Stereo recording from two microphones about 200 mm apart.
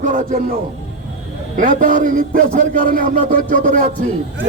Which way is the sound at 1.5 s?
40° right (ahead or behind).